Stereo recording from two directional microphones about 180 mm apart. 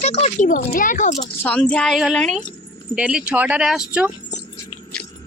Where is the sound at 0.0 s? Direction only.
35° left (ahead or behind).